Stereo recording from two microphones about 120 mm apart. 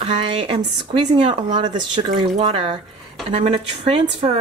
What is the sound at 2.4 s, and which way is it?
Speech, 50° right (ahead or behind).